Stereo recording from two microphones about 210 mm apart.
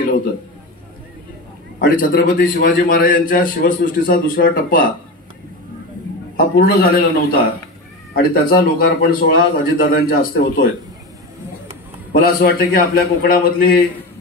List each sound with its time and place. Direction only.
1.8 s a man's voice: 40° left (ahead or behind)
6.3 s a man's voice: 45° left (ahead or behind)
12.1 s a man's voice: 45° left (ahead or behind)